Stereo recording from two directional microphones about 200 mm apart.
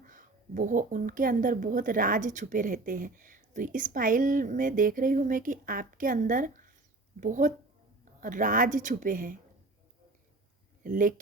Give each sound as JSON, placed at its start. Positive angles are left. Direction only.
{"t": 0.0, "sound": "speech", "side_deg": -40}
{"t": 10.8, "sound": "speech", "side_deg": -40}